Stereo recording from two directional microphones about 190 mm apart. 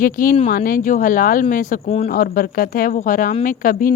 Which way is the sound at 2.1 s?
50° left (ahead or behind).